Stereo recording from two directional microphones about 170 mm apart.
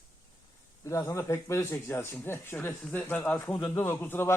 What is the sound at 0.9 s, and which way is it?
A man's voice, 20° left (ahead or behind).